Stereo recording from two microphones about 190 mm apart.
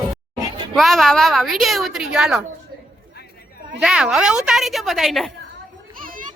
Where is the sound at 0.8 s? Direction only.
Centre (ahead or behind).